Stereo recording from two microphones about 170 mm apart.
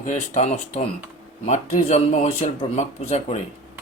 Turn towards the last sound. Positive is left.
turn(degrees=40)  # may be behind; listen again after turning